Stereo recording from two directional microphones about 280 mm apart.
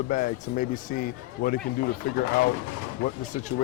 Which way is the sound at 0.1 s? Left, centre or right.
Left.